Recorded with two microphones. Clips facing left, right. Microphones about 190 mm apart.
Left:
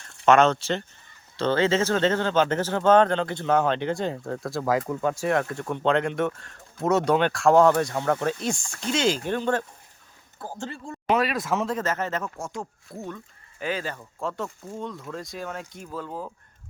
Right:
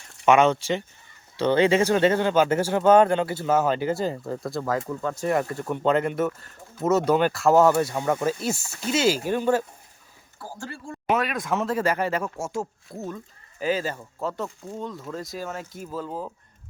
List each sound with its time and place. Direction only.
0.3 s speech: 10° right (ahead or behind); by 5.3 s 10° left (ahead or behind)
5.3 s speech: centre (ahead or behind)
11.1 s speech: centre (ahead or behind)
13.6 s speech: 35° right (ahead or behind)
14.2 s speech: centre (ahead or behind)